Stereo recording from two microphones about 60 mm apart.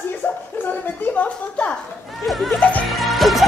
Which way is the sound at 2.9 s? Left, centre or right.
Centre.